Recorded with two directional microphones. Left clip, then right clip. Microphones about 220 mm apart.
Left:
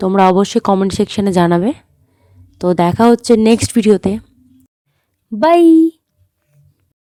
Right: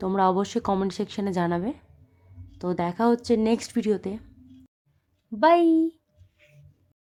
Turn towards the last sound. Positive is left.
turn(degrees=35)  # may be behind; listen again after turning